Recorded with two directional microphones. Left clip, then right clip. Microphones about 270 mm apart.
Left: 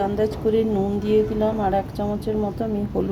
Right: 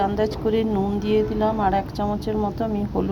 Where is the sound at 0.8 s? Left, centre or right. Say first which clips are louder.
Left 1 dB; right.